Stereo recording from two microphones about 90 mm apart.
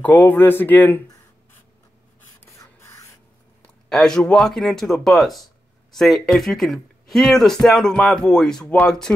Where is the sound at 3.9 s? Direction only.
5° left (ahead or behind).